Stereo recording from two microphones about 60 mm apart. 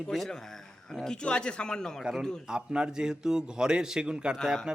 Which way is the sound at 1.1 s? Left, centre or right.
Centre.